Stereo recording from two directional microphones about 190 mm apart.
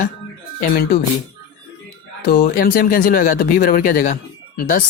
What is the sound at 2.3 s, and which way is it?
Speech, 50° left (ahead or behind).